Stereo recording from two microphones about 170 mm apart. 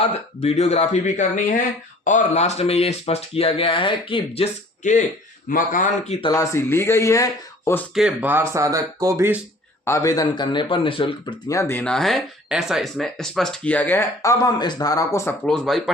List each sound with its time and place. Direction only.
0.1 s speech: 40° left (ahead or behind)
4.8 s a man's voice: 45° left (ahead or behind)
6.2 s speech: 20° left (ahead or behind)
7.9 s speech: 5° right (ahead or behind)
9.8 s speech: 15° left (ahead or behind)
15.4 s speech: centre (ahead or behind)